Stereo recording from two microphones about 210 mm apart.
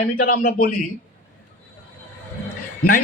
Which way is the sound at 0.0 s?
40° left (ahead or behind).